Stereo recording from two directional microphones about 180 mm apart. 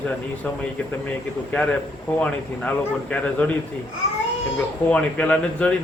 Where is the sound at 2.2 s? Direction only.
5° left (ahead or behind).